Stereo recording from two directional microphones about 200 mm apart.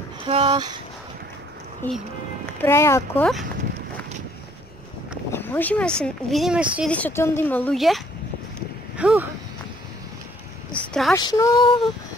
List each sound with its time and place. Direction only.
0.2 s speech: 25° right (ahead or behind)
1.8 s a woman's voice: 10° left (ahead or behind)
5.3 s speech: 10° left (ahead or behind); by 6.9 s 5° right (ahead or behind)
6.9 s a woman's voice: 10° left (ahead or behind); by 9.3 s 5° right (ahead or behind)
10.7 s a sound: 5° left (ahead or behind)
11.1 s speech: 15° left (ahead or behind)